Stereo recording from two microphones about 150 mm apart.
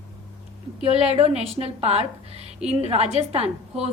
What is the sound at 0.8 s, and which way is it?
A woman's voice, 45° right (ahead or behind).